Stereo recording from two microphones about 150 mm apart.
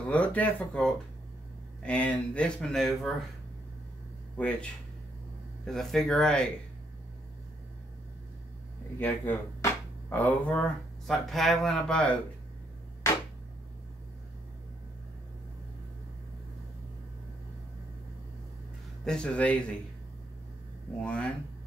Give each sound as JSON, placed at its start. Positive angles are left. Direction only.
{"t": 0.1, "sound": "speech", "side_deg": 10}
{"t": 4.4, "sound": "speech", "side_deg": 10}
{"t": 5.7, "sound": "speech", "side_deg": 0}
{"t": 9.0, "sound": "speech", "side_deg": 15}
{"t": 19.0, "sound": "speech", "side_deg": 5}
{"t": 21.0, "sound": "speech", "side_deg": 5}